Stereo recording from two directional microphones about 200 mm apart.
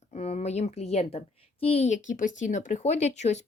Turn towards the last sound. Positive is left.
turn(degrees=35)  # may be behind; listen again after turning